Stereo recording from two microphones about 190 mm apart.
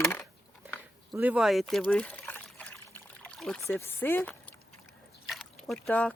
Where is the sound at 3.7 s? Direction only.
10° left (ahead or behind).